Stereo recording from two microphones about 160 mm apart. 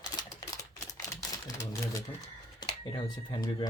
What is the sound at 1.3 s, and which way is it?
Speech, 20° left (ahead or behind).